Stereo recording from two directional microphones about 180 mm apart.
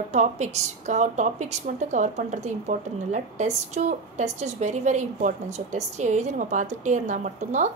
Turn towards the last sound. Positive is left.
turn(degrees=-40)  # may be behind; listen again after turning